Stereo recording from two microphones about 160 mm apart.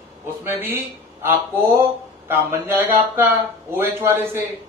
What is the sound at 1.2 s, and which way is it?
Speech, 15° right (ahead or behind).